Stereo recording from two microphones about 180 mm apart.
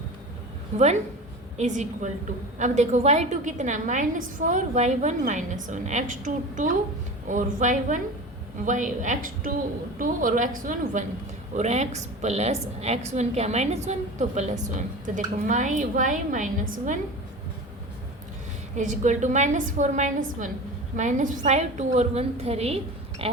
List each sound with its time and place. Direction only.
1.5 s a woman's voice: 40° right (ahead or behind)
18.8 s a woman's voice: 40° right (ahead or behind)